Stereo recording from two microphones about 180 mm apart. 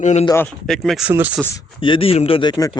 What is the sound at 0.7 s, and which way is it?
Speech, centre (ahead or behind).